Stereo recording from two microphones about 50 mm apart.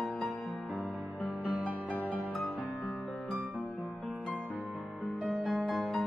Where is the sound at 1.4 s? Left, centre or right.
Right.